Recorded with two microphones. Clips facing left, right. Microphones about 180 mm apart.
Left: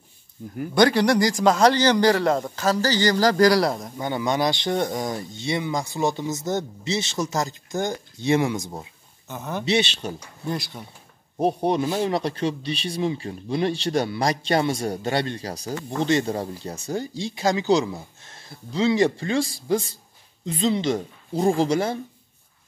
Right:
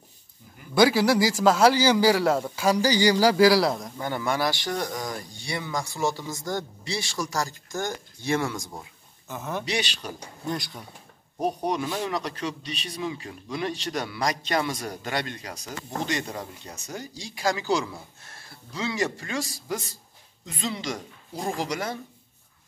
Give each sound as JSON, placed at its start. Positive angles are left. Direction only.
{"t": 0.7, "sound": "a man's voice", "side_deg": -5}
{"t": 4.0, "sound": "speech", "side_deg": 20}
{"t": 9.3, "sound": "speech", "side_deg": 0}
{"t": 9.7, "sound": "speech", "side_deg": 25}
{"t": 10.4, "sound": "speech", "side_deg": 0}
{"t": 11.3, "sound": "speech", "side_deg": 30}